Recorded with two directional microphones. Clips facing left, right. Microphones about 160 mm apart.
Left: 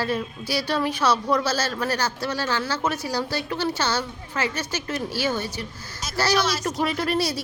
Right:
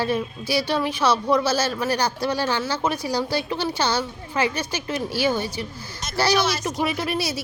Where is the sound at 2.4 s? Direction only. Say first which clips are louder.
Right 2 dB; 25° right (ahead or behind).